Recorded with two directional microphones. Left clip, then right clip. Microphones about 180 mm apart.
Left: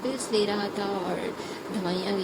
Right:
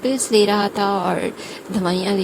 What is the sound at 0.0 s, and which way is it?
Speech, 50° right (ahead or behind).